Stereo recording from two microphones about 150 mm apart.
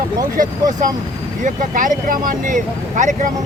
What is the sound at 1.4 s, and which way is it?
Speech, 65° right (ahead or behind).